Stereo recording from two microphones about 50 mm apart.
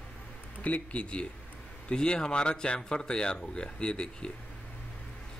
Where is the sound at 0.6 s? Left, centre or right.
Left.